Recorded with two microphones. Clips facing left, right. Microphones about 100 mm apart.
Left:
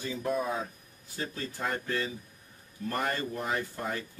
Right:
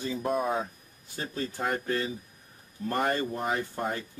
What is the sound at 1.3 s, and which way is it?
Speech, 25° right (ahead or behind).